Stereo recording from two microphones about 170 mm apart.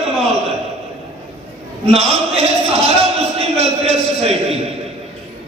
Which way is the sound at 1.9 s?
35° right (ahead or behind).